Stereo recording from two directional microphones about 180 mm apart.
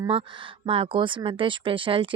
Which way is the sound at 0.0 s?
30° right (ahead or behind).